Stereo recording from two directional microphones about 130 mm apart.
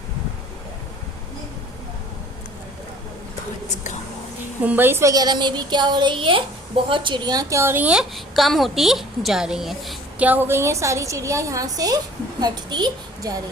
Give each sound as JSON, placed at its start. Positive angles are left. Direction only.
{"t": 4.6, "sound": "a woman's voice", "side_deg": -15}
{"t": 8.1, "sound": "a woman's voice", "side_deg": 0}
{"t": 10.2, "sound": "a woman's voice", "side_deg": -15}